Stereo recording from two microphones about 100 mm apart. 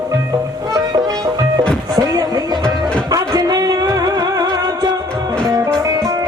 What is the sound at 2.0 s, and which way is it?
Music, 35° right (ahead or behind).